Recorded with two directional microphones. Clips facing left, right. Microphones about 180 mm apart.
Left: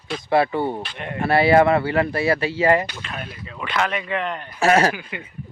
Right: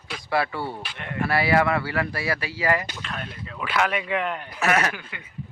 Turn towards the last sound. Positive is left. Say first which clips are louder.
# left 5 dB
turn(degrees=15)  # may be behind; listen again after turning